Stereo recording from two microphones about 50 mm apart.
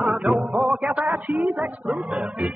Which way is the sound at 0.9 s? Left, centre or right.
Right.